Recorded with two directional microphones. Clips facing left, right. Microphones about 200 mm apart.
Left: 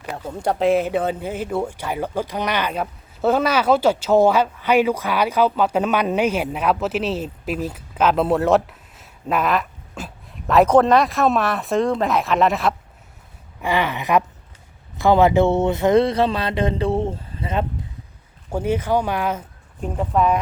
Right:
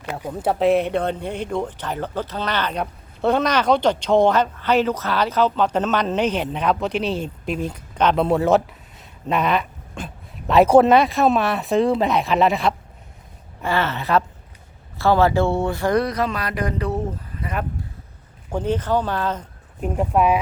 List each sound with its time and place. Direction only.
0.2 s speech: 10° right (ahead or behind)
13.6 s speech: 15° left (ahead or behind)
18.5 s speech: 10° left (ahead or behind)
19.8 s speech: 10° right (ahead or behind)